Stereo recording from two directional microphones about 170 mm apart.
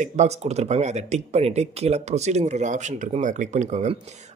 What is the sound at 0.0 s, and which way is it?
Speech, 40° right (ahead or behind).